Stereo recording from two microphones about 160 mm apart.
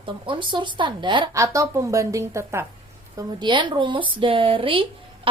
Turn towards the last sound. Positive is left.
turn(degrees=-35)  # may be behind; listen again after turning